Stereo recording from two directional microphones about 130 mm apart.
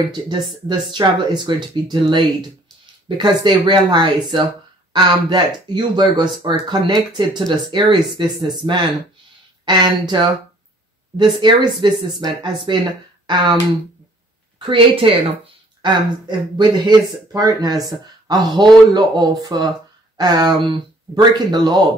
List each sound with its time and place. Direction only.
0.1 s speech: 35° right (ahead or behind)
14.6 s speech: 40° right (ahead or behind)